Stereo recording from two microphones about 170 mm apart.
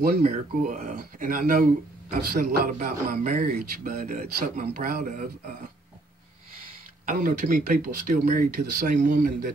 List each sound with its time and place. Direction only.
0.0 s speech: 45° right (ahead or behind)
7.1 s speech: 50° right (ahead or behind)